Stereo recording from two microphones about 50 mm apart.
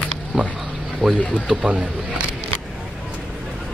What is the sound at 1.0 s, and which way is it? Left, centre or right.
Speech, centre.